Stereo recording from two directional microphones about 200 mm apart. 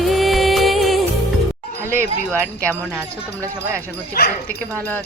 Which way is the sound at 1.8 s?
10° right (ahead or behind).